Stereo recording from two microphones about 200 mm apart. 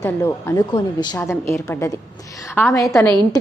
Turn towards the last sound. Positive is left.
turn(degrees=10)  # may be behind; listen again after turning